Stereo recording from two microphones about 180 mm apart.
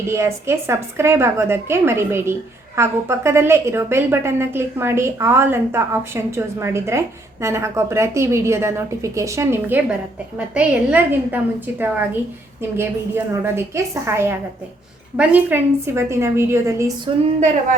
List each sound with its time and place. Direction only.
0.1 s a woman's voice: 15° right (ahead or behind)